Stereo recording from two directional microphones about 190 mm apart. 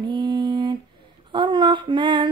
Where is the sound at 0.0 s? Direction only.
25° right (ahead or behind).